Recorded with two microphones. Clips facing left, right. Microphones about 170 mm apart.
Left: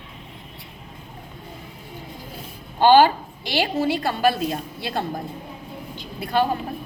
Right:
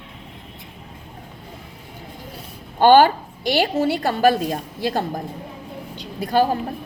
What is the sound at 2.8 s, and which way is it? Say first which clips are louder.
A woman's voice: right 2 dB; 45° right (ahead or behind).